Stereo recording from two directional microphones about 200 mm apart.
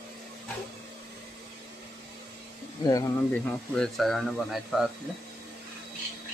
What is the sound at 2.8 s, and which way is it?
Speech, 15° left (ahead or behind).